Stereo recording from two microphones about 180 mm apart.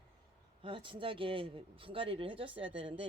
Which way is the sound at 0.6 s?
30° right (ahead or behind).